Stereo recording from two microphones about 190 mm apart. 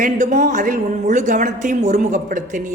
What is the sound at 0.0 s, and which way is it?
A woman's voice, 40° right (ahead or behind).